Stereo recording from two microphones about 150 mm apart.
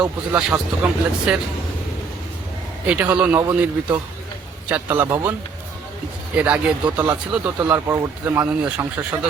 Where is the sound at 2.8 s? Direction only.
10° right (ahead or behind).